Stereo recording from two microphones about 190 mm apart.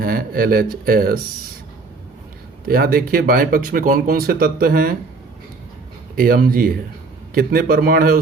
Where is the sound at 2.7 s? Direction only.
50° right (ahead or behind).